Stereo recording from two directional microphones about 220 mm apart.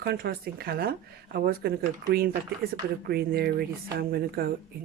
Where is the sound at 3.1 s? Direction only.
45° right (ahead or behind).